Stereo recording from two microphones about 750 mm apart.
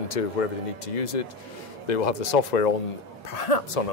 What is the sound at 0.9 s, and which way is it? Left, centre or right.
Speech, left.